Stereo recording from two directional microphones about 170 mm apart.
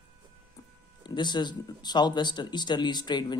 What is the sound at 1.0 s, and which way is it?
Speech, 25° left (ahead or behind).